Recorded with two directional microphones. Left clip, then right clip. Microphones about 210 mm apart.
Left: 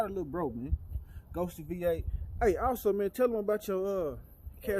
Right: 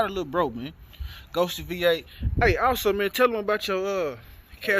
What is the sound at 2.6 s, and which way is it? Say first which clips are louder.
Speech: right 7 dB; centre (ahead or behind).